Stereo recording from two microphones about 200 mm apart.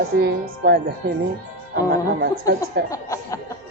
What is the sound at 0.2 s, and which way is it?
Speech, 55° right (ahead or behind).